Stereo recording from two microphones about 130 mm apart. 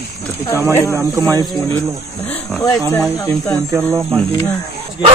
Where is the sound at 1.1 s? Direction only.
30° right (ahead or behind).